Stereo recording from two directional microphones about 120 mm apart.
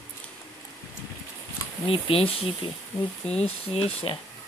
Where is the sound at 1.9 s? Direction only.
50° left (ahead or behind).